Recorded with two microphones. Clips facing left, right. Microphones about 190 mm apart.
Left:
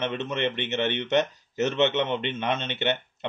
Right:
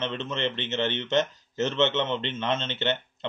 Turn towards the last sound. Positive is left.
turn(degrees=15)  # may be behind; listen again after turning